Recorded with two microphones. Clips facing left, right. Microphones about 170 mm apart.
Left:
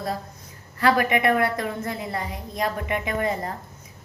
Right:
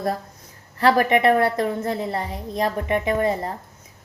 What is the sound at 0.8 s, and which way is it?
A woman's voice, 35° right (ahead or behind).